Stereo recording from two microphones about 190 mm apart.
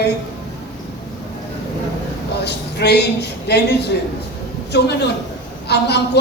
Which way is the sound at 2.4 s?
60° left (ahead or behind).